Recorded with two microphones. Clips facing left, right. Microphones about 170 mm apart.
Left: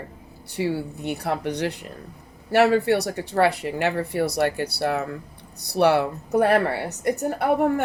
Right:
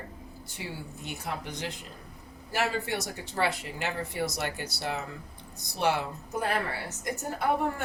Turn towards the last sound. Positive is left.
turn(degrees=65)  # may be behind; listen again after turning